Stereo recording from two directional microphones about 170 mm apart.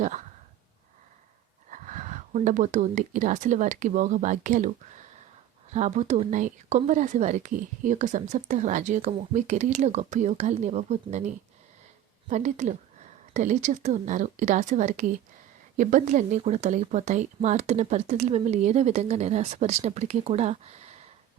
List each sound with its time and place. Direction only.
0.0 s speech: 45° right (ahead or behind)
1.7 s speech: 45° right (ahead or behind)
5.7 s speech: 45° right (ahead or behind)